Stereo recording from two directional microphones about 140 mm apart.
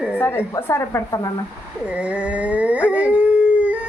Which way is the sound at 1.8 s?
10° right (ahead or behind).